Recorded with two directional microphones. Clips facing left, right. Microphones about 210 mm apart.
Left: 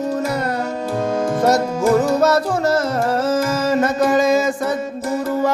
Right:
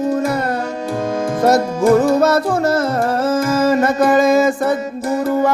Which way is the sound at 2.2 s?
55° right (ahead or behind).